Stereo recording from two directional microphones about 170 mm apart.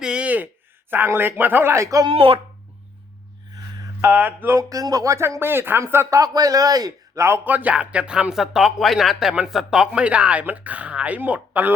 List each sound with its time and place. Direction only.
0.0 s a sound: 5° right (ahead or behind)
0.9 s speech: 10° right (ahead or behind)
2.0 s speech: 35° right (ahead or behind)
4.0 s speech: 10° right (ahead or behind)